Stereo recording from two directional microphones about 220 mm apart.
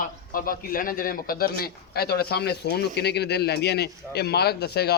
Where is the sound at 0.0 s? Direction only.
40° left (ahead or behind).